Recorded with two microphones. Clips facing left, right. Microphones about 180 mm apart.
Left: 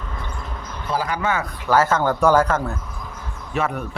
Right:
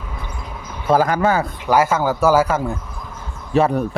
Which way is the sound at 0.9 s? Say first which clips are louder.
Right 7 dB; 45° right (ahead or behind).